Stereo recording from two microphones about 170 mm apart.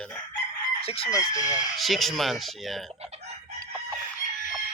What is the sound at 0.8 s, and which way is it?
Chicken, 35° left (ahead or behind).